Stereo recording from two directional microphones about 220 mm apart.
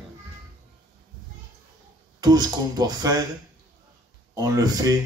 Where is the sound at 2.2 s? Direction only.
20° right (ahead or behind).